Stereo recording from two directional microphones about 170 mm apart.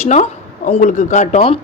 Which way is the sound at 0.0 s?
40° left (ahead or behind).